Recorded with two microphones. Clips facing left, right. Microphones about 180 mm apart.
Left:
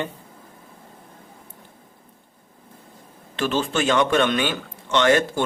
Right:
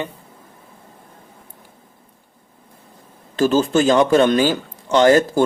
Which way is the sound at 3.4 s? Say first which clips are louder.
Right 7 dB; 40° right (ahead or behind).